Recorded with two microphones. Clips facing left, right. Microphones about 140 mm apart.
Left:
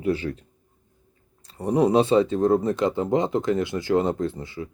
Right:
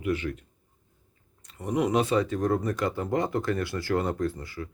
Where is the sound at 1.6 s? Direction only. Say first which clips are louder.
Left 6 dB; 35° left (ahead or behind).